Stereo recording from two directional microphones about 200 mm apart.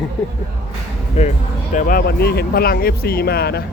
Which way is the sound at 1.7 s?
45° left (ahead or behind).